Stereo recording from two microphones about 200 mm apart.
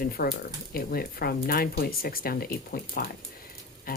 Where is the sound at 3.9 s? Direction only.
45° left (ahead or behind).